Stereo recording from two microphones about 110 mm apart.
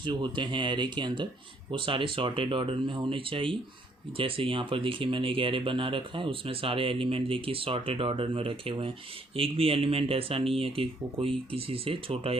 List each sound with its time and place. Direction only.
0.1 s speech: 45° right (ahead or behind)